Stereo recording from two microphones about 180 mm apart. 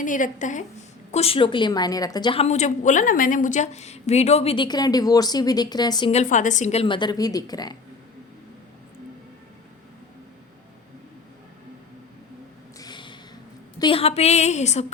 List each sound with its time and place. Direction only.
0.0 s a woman's voice: 45° left (ahead or behind)
1.1 s a woman's voice: 30° left (ahead or behind)
6.1 s a woman's voice: 40° left (ahead or behind); by 7.8 s 20° left (ahead or behind)
12.8 s a sound: 25° left (ahead or behind)
13.7 s a woman's voice: 30° left (ahead or behind)